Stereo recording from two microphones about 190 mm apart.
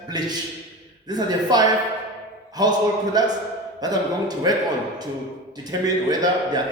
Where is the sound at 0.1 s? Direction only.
20° right (ahead or behind).